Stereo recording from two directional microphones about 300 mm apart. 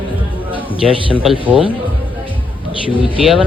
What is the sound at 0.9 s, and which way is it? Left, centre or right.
Speech, centre.